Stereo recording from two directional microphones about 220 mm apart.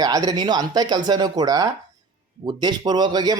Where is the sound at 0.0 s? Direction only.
15° right (ahead or behind).